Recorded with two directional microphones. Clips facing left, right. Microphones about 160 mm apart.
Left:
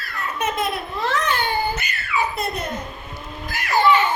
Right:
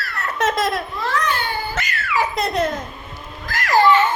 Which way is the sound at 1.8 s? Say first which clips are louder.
Right 3 dB; 90° right.